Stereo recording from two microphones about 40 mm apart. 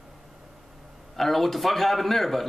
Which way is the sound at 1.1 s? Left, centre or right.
Centre.